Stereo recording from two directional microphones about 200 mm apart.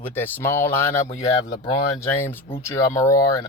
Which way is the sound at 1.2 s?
30° left (ahead or behind).